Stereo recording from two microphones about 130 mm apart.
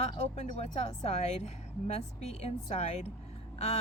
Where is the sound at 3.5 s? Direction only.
55° left (ahead or behind).